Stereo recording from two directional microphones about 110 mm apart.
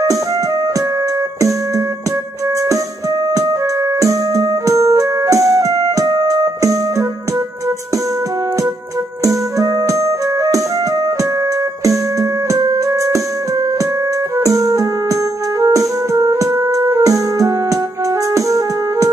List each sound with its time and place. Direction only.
3.3 s organ: 30° right (ahead or behind)
9.2 s music: 30° right (ahead or behind)
11.8 s music: 30° right (ahead or behind)
15.6 s keyboard: 30° right (ahead or behind)